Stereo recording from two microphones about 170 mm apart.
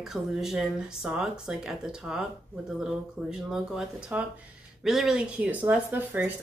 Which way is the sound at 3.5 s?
5° right (ahead or behind).